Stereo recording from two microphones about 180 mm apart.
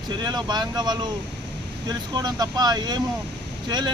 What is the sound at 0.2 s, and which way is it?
Speech, 25° right (ahead or behind).